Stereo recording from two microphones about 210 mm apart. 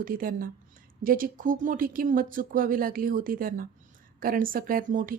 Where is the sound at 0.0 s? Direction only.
40° right (ahead or behind).